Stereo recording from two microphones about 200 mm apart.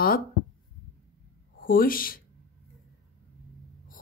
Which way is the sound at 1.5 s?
45° left (ahead or behind).